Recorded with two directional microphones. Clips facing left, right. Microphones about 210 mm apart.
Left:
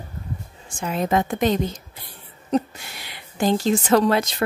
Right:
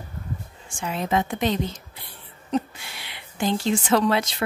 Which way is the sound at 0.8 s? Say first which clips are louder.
Left 3 dB; 45° left (ahead or behind).